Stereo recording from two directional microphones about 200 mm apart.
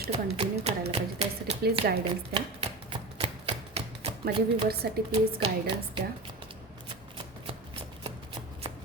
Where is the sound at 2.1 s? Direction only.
25° right (ahead or behind).